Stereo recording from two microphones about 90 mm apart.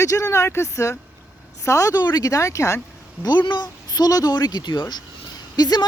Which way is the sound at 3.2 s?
60° left (ahead or behind).